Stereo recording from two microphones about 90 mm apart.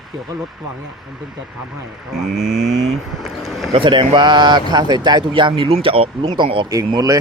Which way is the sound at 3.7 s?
70° right (ahead or behind).